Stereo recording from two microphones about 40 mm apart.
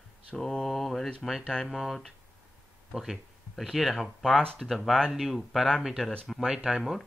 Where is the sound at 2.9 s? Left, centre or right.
Centre.